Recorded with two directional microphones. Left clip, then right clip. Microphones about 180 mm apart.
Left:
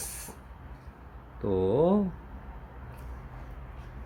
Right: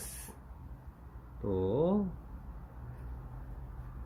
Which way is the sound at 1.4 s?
15° left (ahead or behind).